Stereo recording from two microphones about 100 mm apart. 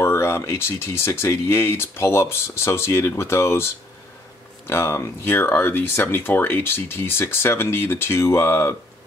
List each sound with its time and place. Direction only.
0.0 s speech: 25° left (ahead or behind)